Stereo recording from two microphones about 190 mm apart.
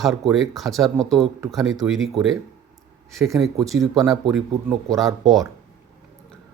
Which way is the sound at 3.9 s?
Centre (ahead or behind).